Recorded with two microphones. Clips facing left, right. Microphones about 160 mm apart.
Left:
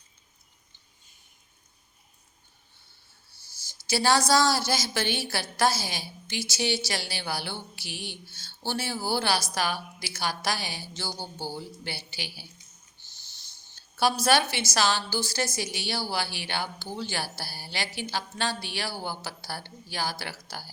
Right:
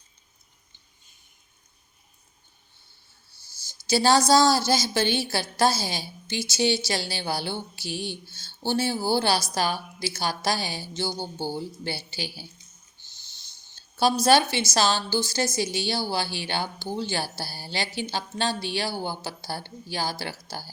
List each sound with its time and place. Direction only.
3.7 s a woman's voice: 25° right (ahead or behind)
13.9 s a woman's voice: 25° right (ahead or behind)